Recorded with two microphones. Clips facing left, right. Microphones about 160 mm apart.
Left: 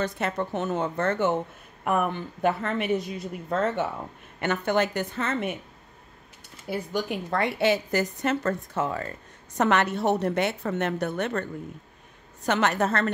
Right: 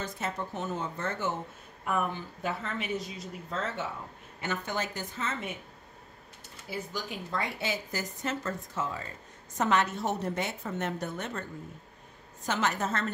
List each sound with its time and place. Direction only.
0.0 s a woman's voice: 70° left (ahead or behind)
4.4 s a woman's voice: 65° left (ahead or behind)
6.7 s a woman's voice: 60° left (ahead or behind)
12.4 s a woman's voice: 65° left (ahead or behind)